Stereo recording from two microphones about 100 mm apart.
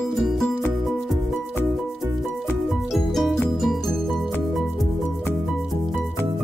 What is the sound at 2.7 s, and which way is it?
Music, centre (ahead or behind).